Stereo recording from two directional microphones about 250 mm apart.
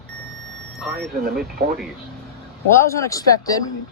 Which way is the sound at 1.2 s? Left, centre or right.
Right.